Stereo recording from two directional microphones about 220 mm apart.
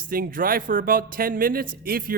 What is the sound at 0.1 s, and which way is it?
Speech, 40° right (ahead or behind).